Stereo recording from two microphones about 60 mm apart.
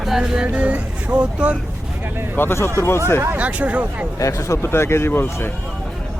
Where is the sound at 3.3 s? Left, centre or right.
Right.